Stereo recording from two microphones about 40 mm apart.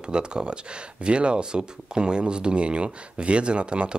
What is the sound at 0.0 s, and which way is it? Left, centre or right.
Speech, right.